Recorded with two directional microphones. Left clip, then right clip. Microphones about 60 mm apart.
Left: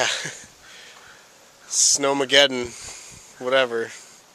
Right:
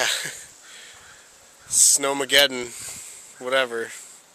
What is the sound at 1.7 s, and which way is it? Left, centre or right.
Speech, centre.